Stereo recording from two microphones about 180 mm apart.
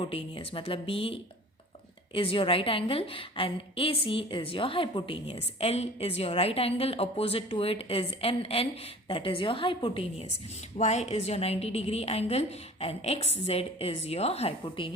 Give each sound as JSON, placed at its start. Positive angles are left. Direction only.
{"t": 0.0, "sound": "a woman's voice", "side_deg": 30}